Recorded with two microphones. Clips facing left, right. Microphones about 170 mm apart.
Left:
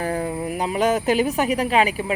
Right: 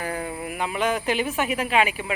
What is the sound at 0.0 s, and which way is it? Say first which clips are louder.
A woman's voice: left 5 dB; 35° left (ahead or behind).